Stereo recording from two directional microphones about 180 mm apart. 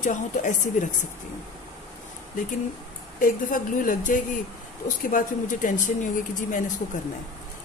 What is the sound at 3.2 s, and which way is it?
Speech, 50° left (ahead or behind).